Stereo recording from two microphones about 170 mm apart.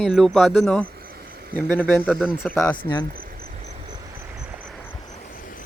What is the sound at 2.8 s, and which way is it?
Speech, 25° left (ahead or behind).